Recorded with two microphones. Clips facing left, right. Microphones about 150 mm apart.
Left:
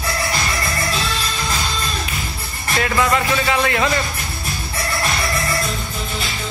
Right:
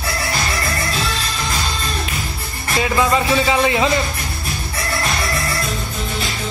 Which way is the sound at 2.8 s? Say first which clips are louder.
Right 1 dB; 15° right (ahead or behind).